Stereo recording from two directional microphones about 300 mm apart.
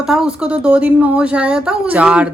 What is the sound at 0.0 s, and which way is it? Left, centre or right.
A woman's voice, centre.